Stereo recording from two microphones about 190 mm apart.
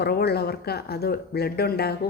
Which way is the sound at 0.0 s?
55° left (ahead or behind).